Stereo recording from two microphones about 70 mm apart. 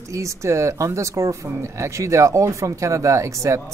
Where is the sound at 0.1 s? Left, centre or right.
Right.